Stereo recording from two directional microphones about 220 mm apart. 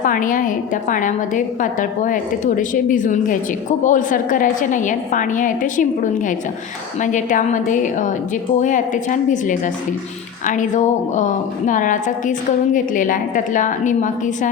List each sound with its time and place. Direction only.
0.0 s a woman's voice: 40° left (ahead or behind)